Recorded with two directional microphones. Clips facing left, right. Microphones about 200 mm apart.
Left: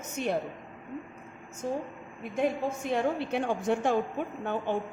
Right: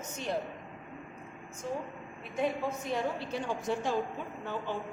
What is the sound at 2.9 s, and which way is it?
A woman's voice, 60° left (ahead or behind).